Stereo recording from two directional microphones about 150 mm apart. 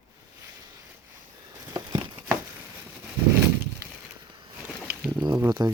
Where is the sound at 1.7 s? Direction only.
25° right (ahead or behind).